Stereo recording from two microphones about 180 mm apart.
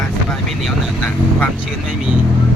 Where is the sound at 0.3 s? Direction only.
5° left (ahead or behind).